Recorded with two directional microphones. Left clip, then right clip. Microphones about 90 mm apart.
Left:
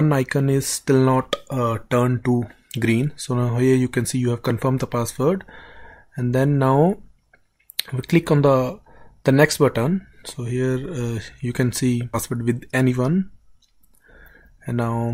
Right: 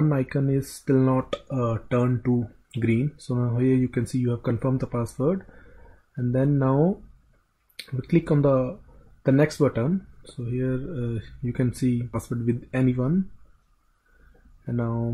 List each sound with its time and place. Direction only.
0.0 s speech: 30° left (ahead or behind)
14.7 s speech: 30° left (ahead or behind)